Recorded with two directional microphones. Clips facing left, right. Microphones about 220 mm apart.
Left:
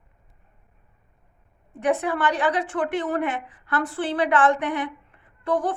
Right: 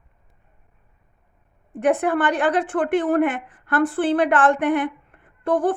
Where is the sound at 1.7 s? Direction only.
50° right (ahead or behind).